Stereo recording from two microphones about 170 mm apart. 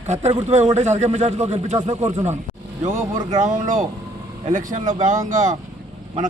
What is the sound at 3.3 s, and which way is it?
Speech, 45° right (ahead or behind).